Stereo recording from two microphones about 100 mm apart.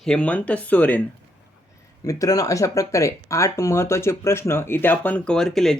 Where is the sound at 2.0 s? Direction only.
35° left (ahead or behind); by 5.3 s 15° left (ahead or behind).